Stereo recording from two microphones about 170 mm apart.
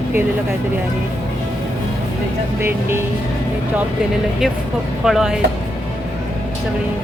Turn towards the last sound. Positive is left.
turn(degrees=-5)  # may be behind; listen again after turning